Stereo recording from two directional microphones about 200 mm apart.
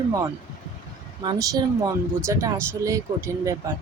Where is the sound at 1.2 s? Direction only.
20° right (ahead or behind).